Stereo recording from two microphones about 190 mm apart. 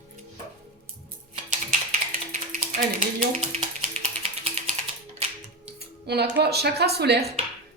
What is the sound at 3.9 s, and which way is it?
Music, 30° right (ahead or behind).